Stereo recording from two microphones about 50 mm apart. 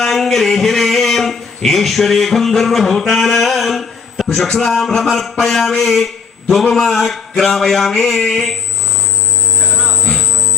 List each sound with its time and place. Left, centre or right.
0.0 s a man's voice: centre
9.6 s a sound: centre
9.9 s music: centre